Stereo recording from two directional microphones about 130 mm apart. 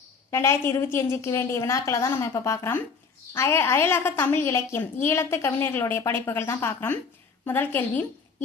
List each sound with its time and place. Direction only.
0.3 s a woman's voice: 20° left (ahead or behind)